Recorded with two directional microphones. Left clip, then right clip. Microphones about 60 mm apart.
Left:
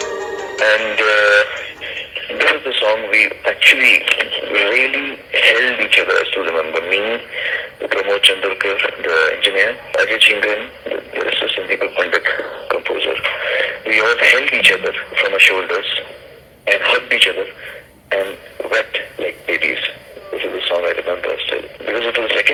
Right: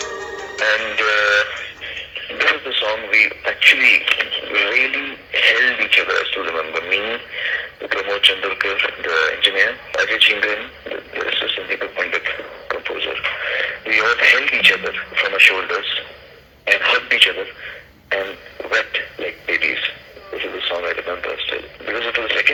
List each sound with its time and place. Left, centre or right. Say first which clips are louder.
0.0 s music: left 4 dB; left
12.4 s a sound: left 6 dB; left
13.8 s speech: left 1 dB; left
16.6 s speech: left 1 dB; centre
20.3 s radio: left 4 dB; centre